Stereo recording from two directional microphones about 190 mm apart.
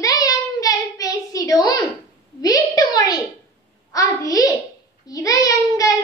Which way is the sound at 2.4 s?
20° left (ahead or behind).